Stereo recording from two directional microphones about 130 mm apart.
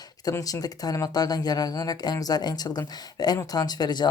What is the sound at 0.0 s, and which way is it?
Speech, 30° left (ahead or behind).